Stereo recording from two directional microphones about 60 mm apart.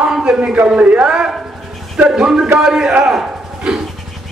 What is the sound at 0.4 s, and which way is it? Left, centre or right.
Speech, centre.